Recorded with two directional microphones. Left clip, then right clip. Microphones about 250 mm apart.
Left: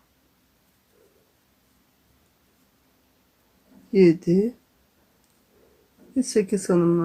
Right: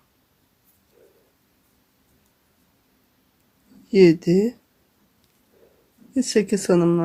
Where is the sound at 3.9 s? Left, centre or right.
Right.